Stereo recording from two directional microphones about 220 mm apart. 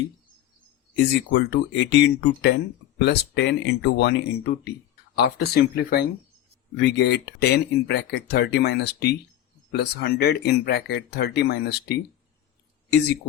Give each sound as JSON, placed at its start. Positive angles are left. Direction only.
{"t": 0.9, "sound": "speech", "side_deg": 50}